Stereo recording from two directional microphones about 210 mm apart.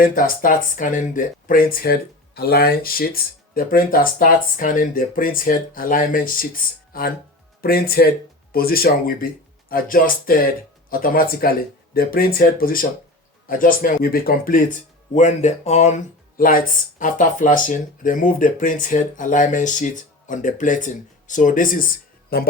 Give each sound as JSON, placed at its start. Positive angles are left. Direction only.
{"t": 0.0, "sound": "speech", "side_deg": 40}